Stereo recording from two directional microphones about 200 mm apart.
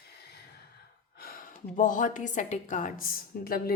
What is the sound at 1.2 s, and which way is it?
Speech, 45° left (ahead or behind).